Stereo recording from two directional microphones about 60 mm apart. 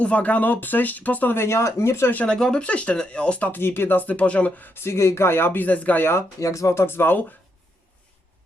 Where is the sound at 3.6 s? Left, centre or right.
Left.